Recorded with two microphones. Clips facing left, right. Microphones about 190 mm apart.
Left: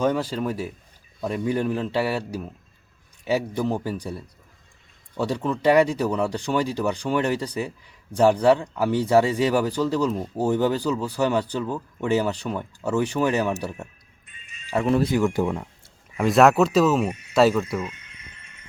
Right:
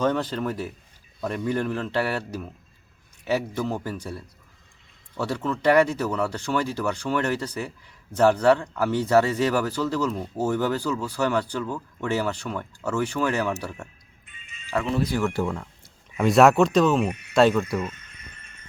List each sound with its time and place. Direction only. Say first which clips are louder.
0.0 s speech: left 1 dB; 10° left (ahead or behind)
15.1 s speech: left 3 dB; 15° left (ahead or behind)
16.1 s speech: even; centre (ahead or behind)
17.1 s speech: even; 65° right (ahead or behind)
17.3 s speech: even; 5° left (ahead or behind)
17.8 s a sound: right 1 dB; 10° left (ahead or behind)